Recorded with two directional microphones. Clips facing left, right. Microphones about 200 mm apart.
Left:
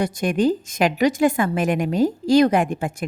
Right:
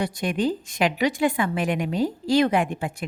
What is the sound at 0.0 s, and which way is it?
A woman's voice, 45° left (ahead or behind).